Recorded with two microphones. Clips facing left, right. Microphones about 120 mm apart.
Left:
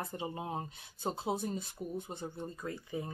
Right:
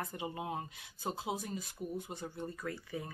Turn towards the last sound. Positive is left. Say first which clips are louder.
# left 2 dB
turn(degrees=25)  # may be behind; listen again after turning